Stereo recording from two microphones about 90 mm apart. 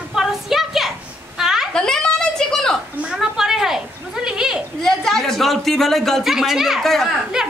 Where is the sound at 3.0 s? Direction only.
10° right (ahead or behind).